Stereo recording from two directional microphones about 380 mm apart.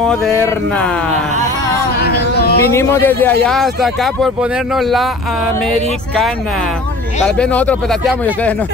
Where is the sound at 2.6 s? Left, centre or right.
Centre.